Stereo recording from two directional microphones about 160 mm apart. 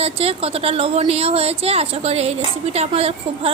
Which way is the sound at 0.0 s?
40° right (ahead or behind).